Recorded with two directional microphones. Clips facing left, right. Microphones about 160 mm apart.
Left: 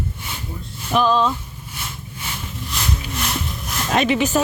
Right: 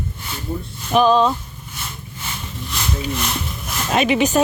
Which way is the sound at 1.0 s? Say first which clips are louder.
Right 3 dB; 15° right (ahead or behind).